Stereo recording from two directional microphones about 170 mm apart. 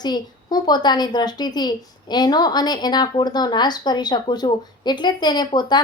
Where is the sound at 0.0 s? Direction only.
25° left (ahead or behind).